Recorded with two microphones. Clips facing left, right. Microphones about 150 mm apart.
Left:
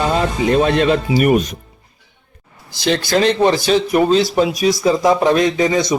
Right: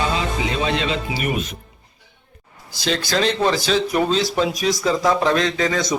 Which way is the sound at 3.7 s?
10° left (ahead or behind).